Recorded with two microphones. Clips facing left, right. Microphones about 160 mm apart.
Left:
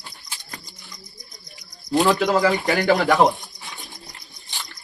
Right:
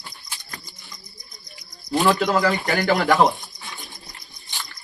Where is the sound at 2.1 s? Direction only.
10° left (ahead or behind).